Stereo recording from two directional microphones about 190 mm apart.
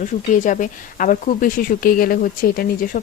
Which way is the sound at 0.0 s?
40° left (ahead or behind).